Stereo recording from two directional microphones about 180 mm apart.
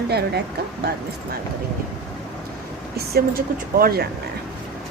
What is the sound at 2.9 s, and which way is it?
Speech, 60° right (ahead or behind).